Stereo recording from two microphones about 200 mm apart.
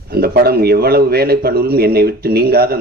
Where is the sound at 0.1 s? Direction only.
50° right (ahead or behind).